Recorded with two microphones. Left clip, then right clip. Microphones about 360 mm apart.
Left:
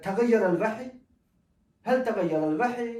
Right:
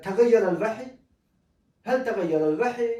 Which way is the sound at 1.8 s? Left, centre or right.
Centre.